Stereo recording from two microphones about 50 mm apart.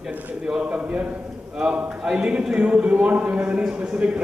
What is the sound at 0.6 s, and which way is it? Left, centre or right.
Speech, right.